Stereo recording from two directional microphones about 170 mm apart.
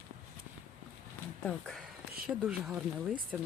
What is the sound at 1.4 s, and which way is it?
Speech, 5° left (ahead or behind).